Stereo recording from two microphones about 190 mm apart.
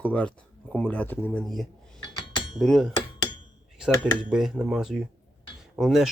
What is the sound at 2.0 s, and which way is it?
Cutlery, 25° left (ahead or behind).